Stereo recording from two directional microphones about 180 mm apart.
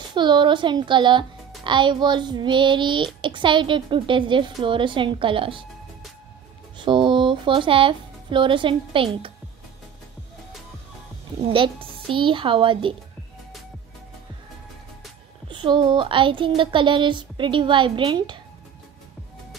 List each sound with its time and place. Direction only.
0.1 s speech: 25° right (ahead or behind)
6.8 s speech: 25° right (ahead or behind)
11.5 s speech: 30° right (ahead or behind)
15.4 s speech: 25° right (ahead or behind)